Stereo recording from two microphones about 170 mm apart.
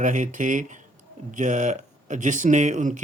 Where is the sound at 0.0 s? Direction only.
50° right (ahead or behind).